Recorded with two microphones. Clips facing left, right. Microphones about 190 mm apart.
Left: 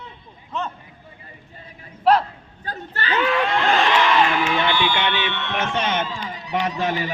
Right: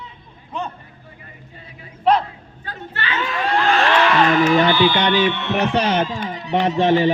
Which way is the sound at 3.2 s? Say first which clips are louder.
Left 6 dB; 60° left (ahead or behind).